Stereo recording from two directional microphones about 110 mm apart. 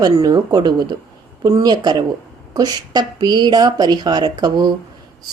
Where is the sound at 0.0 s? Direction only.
40° right (ahead or behind).